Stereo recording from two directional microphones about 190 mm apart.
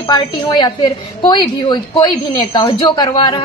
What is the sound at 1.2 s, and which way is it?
A woman's voice, 25° left (ahead or behind).